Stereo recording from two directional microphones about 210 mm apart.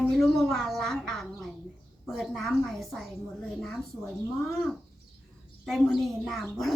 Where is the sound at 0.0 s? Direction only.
Centre (ahead or behind).